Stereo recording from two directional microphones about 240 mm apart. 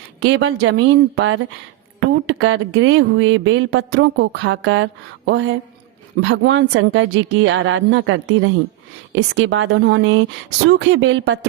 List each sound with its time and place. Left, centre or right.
0.2 s speech: right